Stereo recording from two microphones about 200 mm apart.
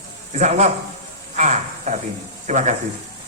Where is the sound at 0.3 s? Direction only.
35° right (ahead or behind).